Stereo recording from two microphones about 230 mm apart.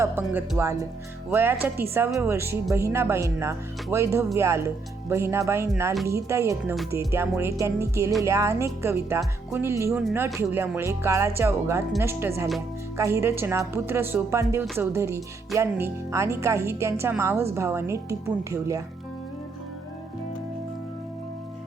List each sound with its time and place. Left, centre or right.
0.0 s speech: centre
2.3 s speech: centre